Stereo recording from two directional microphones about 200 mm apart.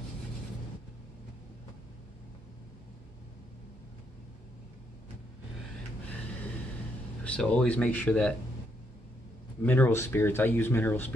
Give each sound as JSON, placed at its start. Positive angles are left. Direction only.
{"t": 7.2, "sound": "speech", "side_deg": 5}
{"t": 9.6, "sound": "speech", "side_deg": 10}